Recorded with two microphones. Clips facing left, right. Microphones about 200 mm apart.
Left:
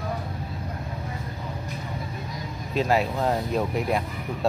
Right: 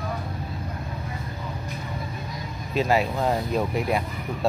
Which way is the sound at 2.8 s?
Centre (ahead or behind).